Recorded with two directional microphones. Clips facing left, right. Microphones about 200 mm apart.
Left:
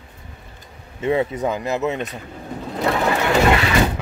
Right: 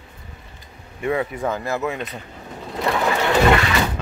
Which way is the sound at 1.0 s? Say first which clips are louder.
Left 3 dB; 25° left (ahead or behind).